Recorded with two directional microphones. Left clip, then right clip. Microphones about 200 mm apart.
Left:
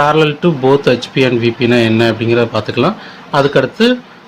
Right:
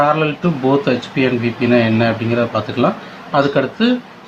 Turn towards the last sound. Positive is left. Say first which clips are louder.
# left 5 dB
turn(degrees=55)  # may be behind; listen again after turning